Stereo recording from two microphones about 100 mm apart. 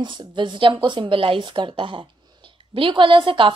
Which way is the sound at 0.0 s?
50° right (ahead or behind).